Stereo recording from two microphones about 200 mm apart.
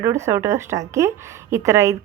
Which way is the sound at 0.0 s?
15° right (ahead or behind).